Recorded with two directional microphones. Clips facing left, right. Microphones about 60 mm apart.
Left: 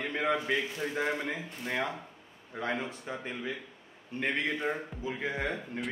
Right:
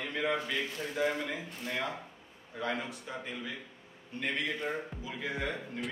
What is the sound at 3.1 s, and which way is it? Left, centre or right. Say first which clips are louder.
Music: left 3 dB; left.